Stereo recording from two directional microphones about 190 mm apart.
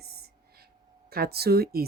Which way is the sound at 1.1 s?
55° right (ahead or behind).